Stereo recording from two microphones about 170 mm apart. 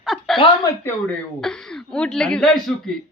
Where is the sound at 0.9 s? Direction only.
5° left (ahead or behind).